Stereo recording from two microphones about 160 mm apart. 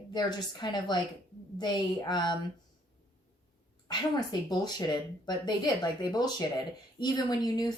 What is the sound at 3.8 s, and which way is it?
Speech, 25° left (ahead or behind).